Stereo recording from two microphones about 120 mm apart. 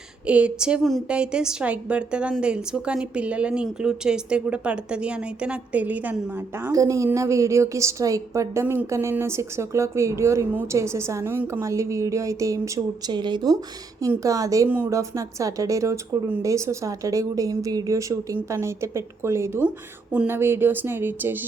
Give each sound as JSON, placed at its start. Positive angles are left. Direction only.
{"t": 0.3, "sound": "speech", "side_deg": -10}
{"t": 6.7, "sound": "a woman's voice", "side_deg": -25}
{"t": 13.1, "sound": "a woman's voice", "side_deg": -40}